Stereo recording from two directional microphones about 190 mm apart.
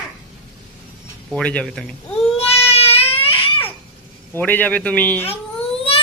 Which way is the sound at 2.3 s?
30° left (ahead or behind).